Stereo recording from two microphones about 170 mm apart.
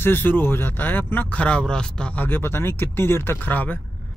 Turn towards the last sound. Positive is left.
turn(degrees=10)  # may be behind; listen again after turning